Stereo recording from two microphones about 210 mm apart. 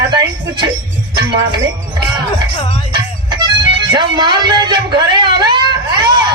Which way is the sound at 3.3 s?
20° right (ahead or behind).